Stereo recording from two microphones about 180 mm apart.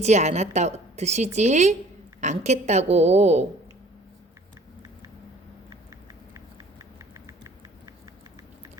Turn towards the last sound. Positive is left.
turn(degrees=-20)  # may be behind; listen again after turning